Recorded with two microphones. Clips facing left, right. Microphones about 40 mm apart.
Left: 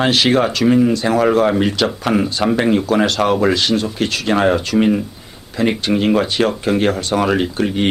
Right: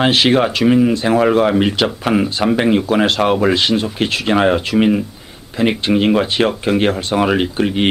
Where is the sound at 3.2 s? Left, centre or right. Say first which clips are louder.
Right 1 dB; centre.